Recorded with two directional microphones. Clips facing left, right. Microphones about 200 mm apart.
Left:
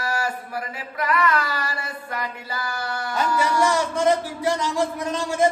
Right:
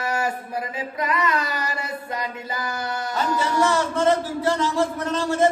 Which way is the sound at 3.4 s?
15° left (ahead or behind).